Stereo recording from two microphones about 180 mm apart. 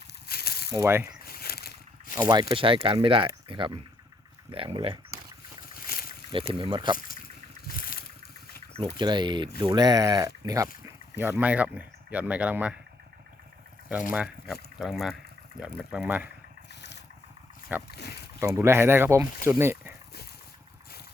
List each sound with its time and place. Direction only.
0.3 s a sound: 60° left (ahead or behind)
0.7 s speech: 15° right (ahead or behind)
1.2 s a sound: 55° left (ahead or behind)
2.2 s speech: 25° right (ahead or behind)
5.8 s boat: 55° left (ahead or behind)
6.5 s speech: 30° right (ahead or behind)
7.7 s vehicle: 50° left (ahead or behind)
9.0 s speech: 25° right (ahead or behind); by 12.7 s 5° right (ahead or behind)
14.1 s speech: 5° right (ahead or behind)
17.7 s speech: 10° right (ahead or behind)